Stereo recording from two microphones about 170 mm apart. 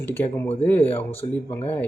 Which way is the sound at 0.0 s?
10° left (ahead or behind).